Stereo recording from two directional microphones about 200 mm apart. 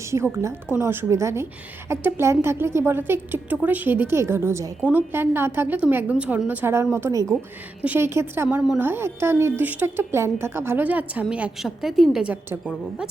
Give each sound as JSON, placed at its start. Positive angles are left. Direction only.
{"t": 0.0, "sound": "a woman's voice", "side_deg": -15}